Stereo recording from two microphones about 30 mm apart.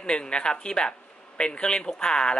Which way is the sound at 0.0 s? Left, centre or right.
Left.